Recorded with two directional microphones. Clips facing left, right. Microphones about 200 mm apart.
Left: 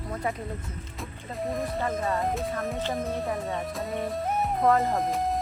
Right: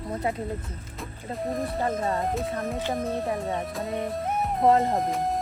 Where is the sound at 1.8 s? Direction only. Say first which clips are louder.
Right 2 dB; 30° right (ahead or behind).